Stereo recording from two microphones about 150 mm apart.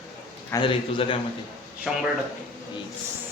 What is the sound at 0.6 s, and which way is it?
Speech, 35° left (ahead or behind).